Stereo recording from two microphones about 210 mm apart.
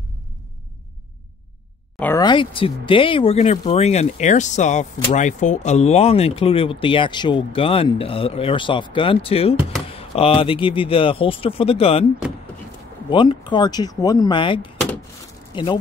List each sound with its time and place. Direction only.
2.0 s a sound: 10° left (ahead or behind)
2.2 s speech: 25° left (ahead or behind)
13.1 s speech: 20° left (ahead or behind)